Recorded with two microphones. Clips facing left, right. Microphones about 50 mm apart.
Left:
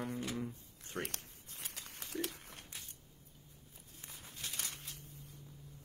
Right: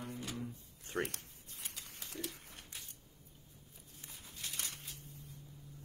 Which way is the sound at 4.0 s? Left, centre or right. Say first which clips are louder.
Left 1 dB; left.